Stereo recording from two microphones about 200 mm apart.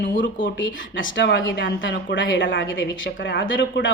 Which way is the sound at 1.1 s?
65° left (ahead or behind).